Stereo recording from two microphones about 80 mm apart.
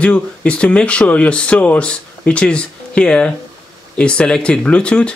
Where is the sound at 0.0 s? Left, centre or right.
Centre.